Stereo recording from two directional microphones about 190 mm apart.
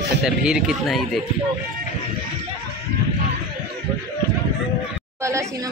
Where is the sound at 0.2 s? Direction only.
5° right (ahead or behind).